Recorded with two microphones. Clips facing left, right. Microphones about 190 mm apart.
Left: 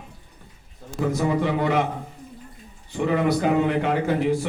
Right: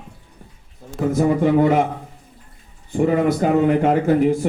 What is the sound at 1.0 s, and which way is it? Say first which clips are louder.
Speech: right 6 dB; 45° right (ahead or behind).